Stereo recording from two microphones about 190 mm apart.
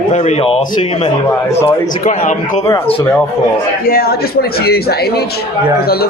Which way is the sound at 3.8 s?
50° left (ahead or behind).